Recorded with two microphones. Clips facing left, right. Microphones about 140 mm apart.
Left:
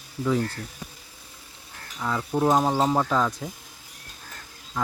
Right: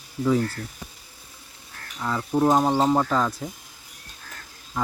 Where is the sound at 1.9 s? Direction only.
Centre (ahead or behind).